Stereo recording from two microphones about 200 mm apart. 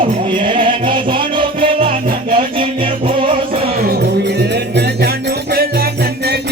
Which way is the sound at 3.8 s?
50° right (ahead or behind).